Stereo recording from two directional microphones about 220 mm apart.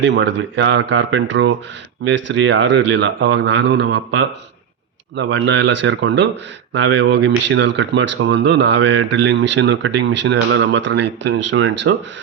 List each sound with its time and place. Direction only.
0.0 s speech: 50° right (ahead or behind)